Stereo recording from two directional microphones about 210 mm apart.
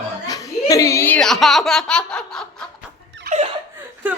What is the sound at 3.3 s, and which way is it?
Laughter, 50° right (ahead or behind).